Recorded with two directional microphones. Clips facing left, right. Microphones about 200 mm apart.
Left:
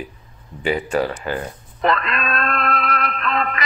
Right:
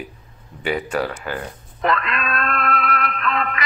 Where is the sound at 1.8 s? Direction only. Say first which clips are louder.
Left 1 dB; 35° left (ahead or behind).